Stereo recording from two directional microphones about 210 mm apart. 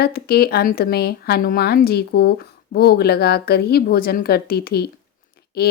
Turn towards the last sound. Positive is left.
turn(degrees=50)  # may be behind; listen again after turning